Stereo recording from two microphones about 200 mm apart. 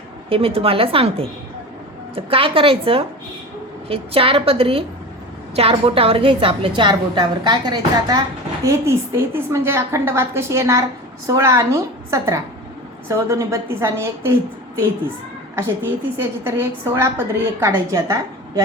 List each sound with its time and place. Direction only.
0.3 s a woman's voice: 30° right (ahead or behind)
15.5 s a woman's voice: 10° right (ahead or behind)